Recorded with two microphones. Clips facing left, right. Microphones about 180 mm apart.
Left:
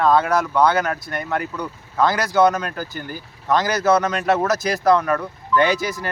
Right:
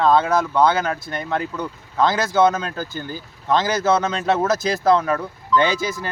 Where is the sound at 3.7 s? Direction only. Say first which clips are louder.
Left 1 dB; 25° right (ahead or behind).